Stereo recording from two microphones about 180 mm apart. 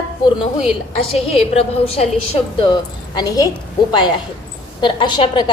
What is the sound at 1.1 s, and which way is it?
A woman's voice, 35° left (ahead or behind).